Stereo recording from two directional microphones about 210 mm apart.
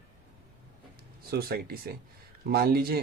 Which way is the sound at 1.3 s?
45° right (ahead or behind).